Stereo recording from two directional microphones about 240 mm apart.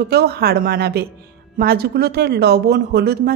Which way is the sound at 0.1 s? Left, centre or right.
Right.